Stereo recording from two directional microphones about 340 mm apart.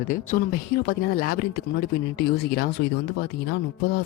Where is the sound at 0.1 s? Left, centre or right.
Left.